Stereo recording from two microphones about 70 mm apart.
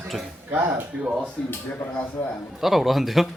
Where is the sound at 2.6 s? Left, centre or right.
Centre.